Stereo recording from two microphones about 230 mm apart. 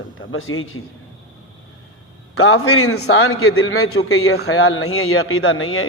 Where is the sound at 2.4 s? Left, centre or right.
Left.